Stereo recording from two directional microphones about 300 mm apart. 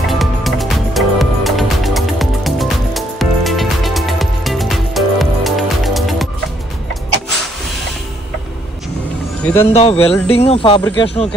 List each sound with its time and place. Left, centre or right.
0.1 s music: centre
9.4 s speech: centre
9.8 s speech: centre